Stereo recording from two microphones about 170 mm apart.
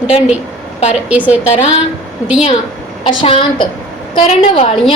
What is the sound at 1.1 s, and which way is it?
Speech, 10° right (ahead or behind).